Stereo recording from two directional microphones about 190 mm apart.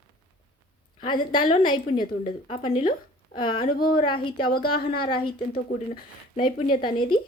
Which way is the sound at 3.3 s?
25° left (ahead or behind).